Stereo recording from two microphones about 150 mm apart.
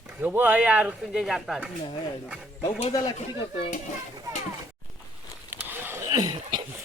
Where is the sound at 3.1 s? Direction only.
50° left (ahead or behind).